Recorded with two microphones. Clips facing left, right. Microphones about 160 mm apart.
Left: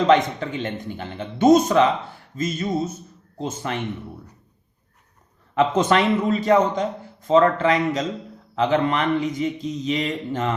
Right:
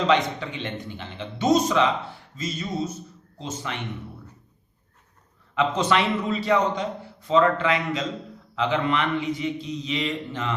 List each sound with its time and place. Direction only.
0.1 s a man's voice: 45° left (ahead or behind)
5.5 s a man's voice: 45° left (ahead or behind)